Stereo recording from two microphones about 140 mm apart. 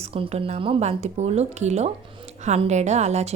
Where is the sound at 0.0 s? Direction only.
45° right (ahead or behind).